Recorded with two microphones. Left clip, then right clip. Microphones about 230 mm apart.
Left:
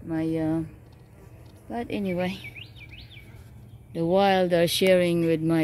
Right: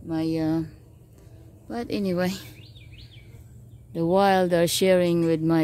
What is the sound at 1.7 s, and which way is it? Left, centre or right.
Speech, right.